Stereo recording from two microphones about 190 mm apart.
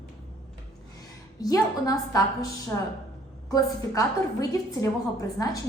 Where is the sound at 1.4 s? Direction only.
20° left (ahead or behind).